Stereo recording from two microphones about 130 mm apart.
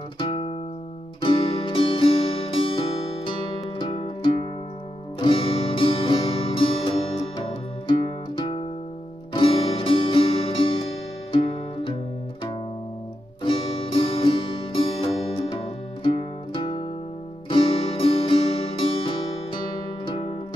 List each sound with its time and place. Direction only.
0.2 s music: 45° left (ahead or behind)
13.4 s music: 45° left (ahead or behind)